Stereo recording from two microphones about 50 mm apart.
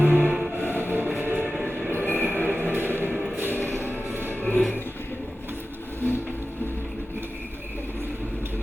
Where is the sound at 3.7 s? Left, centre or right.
Right.